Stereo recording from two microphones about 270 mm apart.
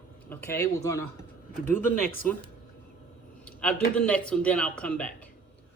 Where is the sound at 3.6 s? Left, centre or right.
Centre.